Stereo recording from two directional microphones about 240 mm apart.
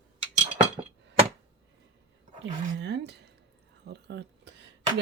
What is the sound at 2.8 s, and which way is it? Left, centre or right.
Speech, right.